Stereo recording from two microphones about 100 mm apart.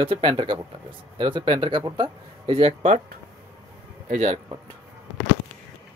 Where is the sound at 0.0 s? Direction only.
55° right (ahead or behind).